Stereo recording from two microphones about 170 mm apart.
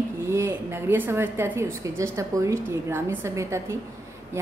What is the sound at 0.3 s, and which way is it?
A woman's voice, 15° right (ahead or behind).